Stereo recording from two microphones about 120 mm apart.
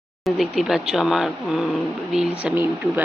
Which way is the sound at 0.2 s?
Centre (ahead or behind).